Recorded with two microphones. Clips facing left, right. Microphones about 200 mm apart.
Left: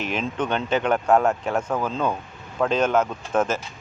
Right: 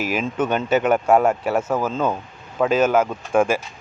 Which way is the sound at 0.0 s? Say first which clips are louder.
Right 4 dB; 5° right (ahead or behind).